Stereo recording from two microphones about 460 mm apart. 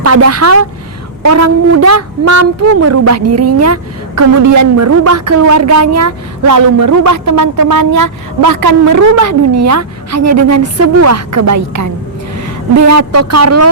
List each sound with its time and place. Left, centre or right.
0.0 s a woman's voice: right